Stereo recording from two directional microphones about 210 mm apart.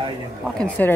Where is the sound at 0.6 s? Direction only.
5° left (ahead or behind).